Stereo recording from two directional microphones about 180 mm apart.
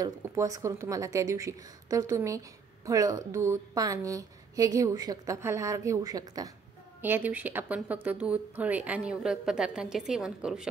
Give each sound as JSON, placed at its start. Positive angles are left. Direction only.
{"t": 0.0, "sound": "a woman's voice", "side_deg": -20}